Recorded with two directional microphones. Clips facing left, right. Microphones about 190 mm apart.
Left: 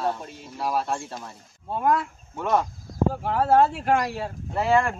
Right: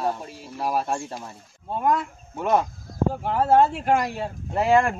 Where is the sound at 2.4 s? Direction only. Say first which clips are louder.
Right 2 dB; 15° right (ahead or behind).